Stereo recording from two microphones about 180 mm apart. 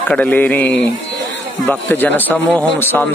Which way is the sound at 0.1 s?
10° left (ahead or behind).